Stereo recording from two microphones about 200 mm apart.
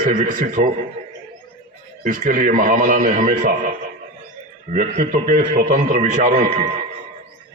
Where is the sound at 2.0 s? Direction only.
40° right (ahead or behind).